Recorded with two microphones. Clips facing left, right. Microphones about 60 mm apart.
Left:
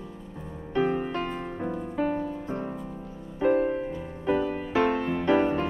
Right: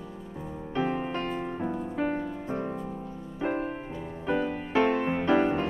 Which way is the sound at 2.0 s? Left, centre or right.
Centre.